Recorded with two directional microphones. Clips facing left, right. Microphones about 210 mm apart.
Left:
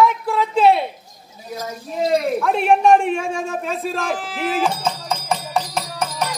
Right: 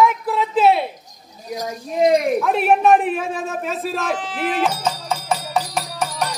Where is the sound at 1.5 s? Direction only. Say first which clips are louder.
Right 2 dB; 15° right (ahead or behind).